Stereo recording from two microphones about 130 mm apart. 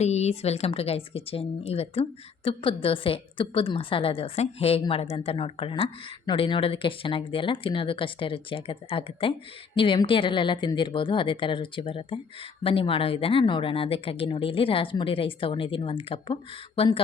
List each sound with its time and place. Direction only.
0.0 s a woman's voice: 55° left (ahead or behind)